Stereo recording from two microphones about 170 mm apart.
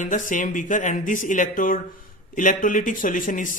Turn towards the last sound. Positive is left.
turn(degrees=50)  # may be behind; listen again after turning